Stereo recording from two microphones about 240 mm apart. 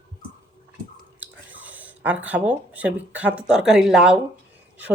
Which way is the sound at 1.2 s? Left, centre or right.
Centre.